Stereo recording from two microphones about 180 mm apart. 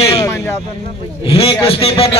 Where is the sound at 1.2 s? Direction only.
30° left (ahead or behind).